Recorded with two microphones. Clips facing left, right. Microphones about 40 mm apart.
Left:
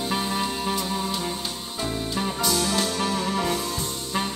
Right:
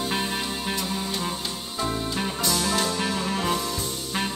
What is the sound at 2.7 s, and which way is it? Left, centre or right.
Music, right.